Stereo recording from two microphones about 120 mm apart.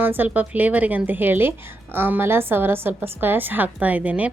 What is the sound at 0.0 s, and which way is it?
A woman's voice, 15° right (ahead or behind).